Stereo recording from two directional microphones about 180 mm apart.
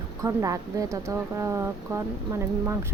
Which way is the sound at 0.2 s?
20° right (ahead or behind).